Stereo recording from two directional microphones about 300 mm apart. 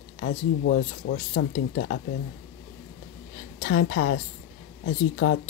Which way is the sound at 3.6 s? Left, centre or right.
Left.